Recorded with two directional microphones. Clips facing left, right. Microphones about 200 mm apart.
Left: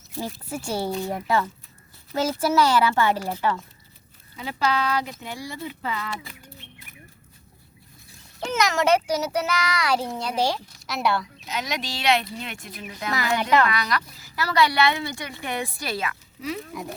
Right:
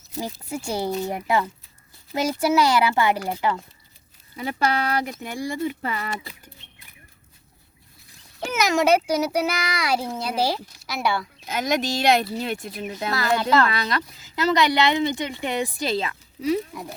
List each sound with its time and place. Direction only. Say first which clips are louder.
0.2 s a child's voice: right 1 dB; 10° right (ahead or behind)
4.6 s speech: even; 50° right (ahead or behind)
8.4 s a child's voice: right 2 dB; 5° right (ahead or behind)
11.4 s speech: right 6 dB; 50° right (ahead or behind); by 13.1 s 30° right (ahead or behind)
13.1 s speech: right 1 dB; 15° left (ahead or behind)
13.7 s speech: right 1 dB; 25° right (ahead or behind)